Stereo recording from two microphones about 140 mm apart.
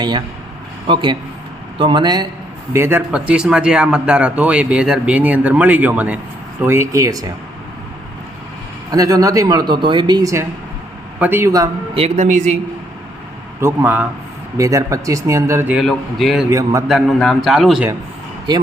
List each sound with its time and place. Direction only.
0.9 s a man's voice: 35° right (ahead or behind)
2.7 s speech: 20° right (ahead or behind)
3.1 s speech: 5° right (ahead or behind); by 7.3 s 25° right (ahead or behind)
8.9 s speech: 25° right (ahead or behind)
11.2 s speech: 15° right (ahead or behind)
11.9 s a man's voice: 50° right (ahead or behind)
13.6 s speech: 15° right (ahead or behind)
14.6 s speech: 25° right (ahead or behind)
15.7 s a man's voice: centre (ahead or behind)
16.5 s speech: 25° right (ahead or behind)
16.9 s a man's voice: centre (ahead or behind)